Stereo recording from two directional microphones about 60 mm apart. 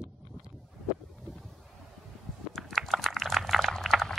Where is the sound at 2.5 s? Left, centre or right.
Centre.